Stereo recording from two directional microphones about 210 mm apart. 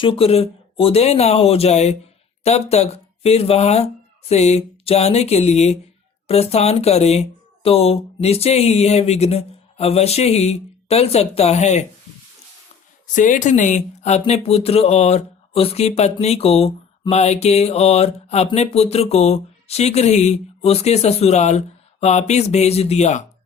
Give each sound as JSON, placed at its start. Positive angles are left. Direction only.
{"t": 0.0, "sound": "speech", "side_deg": 25}
{"t": 13.1, "sound": "speech", "side_deg": 35}